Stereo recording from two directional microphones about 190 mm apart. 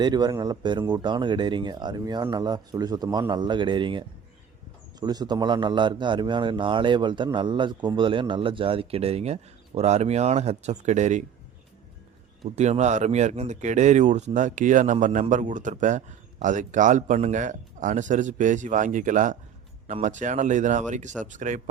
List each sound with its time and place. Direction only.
0.0 s a man's voice: 20° right (ahead or behind); by 11.3 s 40° right (ahead or behind)
12.5 s speech: 35° right (ahead or behind)